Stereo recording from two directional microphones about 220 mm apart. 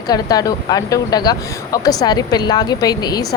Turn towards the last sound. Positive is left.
turn(degrees=15)  # may be behind; listen again after turning